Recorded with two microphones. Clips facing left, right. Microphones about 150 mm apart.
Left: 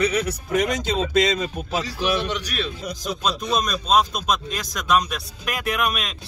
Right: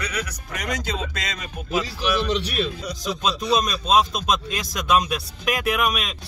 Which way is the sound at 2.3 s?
25° right (ahead or behind).